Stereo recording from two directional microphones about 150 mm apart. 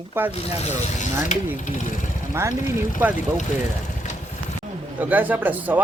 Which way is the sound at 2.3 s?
15° right (ahead or behind).